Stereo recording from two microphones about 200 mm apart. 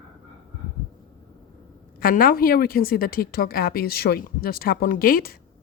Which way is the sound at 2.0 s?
45° left (ahead or behind).